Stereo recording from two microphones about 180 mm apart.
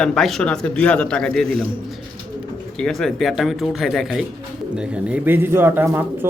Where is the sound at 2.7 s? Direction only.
Centre (ahead or behind).